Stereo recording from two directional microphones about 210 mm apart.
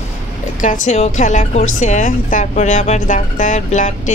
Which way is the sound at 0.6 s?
40° left (ahead or behind).